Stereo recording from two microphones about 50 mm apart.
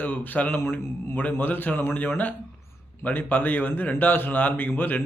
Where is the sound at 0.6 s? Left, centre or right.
Left.